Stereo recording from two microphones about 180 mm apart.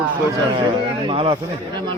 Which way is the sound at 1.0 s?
30° right (ahead or behind).